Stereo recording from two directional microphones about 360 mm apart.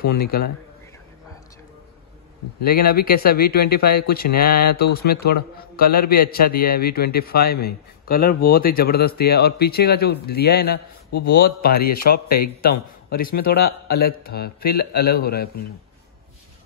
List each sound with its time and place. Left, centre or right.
0.0 s a man's voice: left
2.6 s a man's voice: left